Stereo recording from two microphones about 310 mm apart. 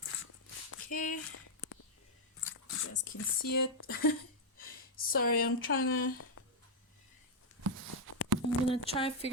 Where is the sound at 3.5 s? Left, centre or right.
Left.